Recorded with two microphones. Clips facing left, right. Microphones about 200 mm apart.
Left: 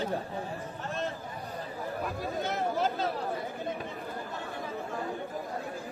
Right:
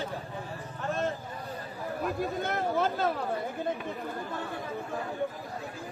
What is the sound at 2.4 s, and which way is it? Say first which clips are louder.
Speech: even; 55° right (ahead or behind).